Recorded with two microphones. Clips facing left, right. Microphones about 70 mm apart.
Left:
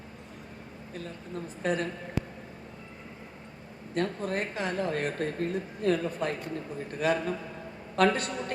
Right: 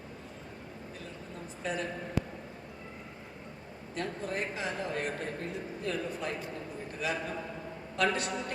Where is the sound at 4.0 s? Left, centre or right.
Left.